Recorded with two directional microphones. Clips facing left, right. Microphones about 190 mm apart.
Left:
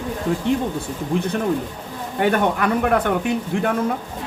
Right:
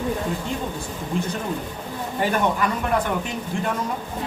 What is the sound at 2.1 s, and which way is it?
Speech, 60° left (ahead or behind).